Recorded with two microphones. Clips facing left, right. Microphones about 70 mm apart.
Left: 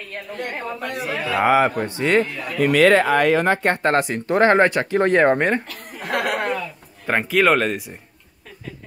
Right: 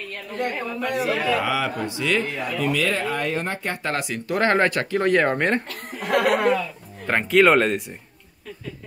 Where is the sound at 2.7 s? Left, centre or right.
Left.